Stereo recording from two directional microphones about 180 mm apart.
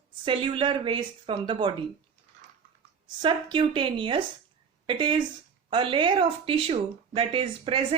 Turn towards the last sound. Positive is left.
turn(degrees=-30)  # may be behind; listen again after turning